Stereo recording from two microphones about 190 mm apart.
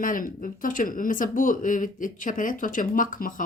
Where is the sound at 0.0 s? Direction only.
45° left (ahead or behind).